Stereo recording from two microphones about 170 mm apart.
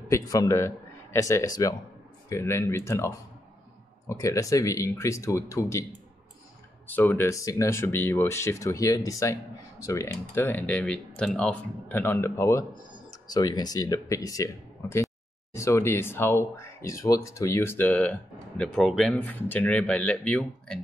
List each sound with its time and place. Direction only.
0.1 s a man's voice: 20° left (ahead or behind)
4.1 s speech: 20° left (ahead or behind)
6.9 s speech: 10° left (ahead or behind)